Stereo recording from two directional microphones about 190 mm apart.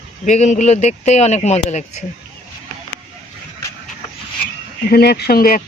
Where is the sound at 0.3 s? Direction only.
40° left (ahead or behind).